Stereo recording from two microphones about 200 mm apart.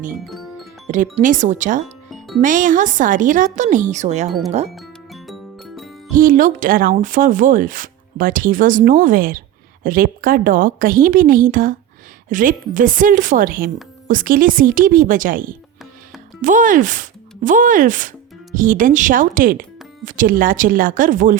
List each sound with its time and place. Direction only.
0.9 s a woman's voice: 40° right (ahead or behind)
2.0 s music: centre (ahead or behind)
2.4 s a woman's voice: 40° right (ahead or behind)
4.3 s speech: centre (ahead or behind)
4.7 s music: centre (ahead or behind)
6.1 s a woman's voice: 45° right (ahead or behind)